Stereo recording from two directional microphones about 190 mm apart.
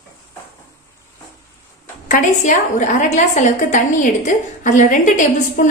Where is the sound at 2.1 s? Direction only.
45° left (ahead or behind).